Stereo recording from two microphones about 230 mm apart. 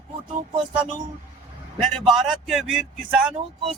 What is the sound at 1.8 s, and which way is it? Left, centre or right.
Speech, centre.